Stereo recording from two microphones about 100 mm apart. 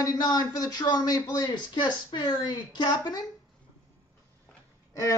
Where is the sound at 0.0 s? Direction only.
40° left (ahead or behind).